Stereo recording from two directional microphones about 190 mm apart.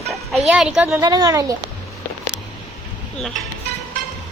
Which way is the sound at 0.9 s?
20° right (ahead or behind).